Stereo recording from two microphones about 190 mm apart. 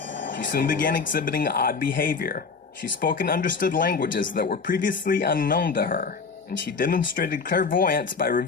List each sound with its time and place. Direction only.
0.5 s speech: 45° left (ahead or behind)